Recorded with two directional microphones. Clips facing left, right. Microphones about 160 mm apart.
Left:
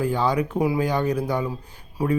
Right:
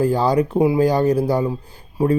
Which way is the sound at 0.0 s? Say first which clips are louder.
Right 5 dB; 35° right (ahead or behind).